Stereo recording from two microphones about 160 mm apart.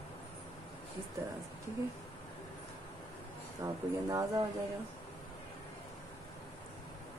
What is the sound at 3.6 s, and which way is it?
Speech, 20° right (ahead or behind).